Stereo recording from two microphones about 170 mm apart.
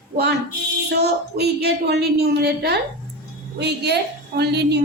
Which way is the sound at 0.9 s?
75° right (ahead or behind).